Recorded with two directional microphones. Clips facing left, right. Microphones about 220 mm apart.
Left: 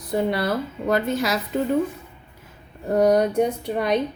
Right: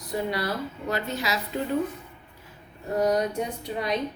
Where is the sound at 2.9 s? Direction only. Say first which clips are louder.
Left 7 dB; 60° left (ahead or behind).